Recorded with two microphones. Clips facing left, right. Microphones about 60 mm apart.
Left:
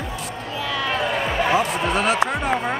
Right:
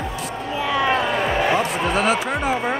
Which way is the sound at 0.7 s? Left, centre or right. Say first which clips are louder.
Right 5 dB; centre.